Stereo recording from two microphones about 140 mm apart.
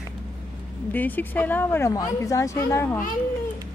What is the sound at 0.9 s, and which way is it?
Speech, 10° left (ahead or behind).